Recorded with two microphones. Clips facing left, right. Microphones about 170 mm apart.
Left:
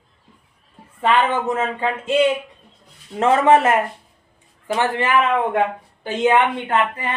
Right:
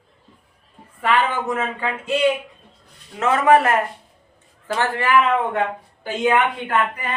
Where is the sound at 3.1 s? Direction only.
30° left (ahead or behind).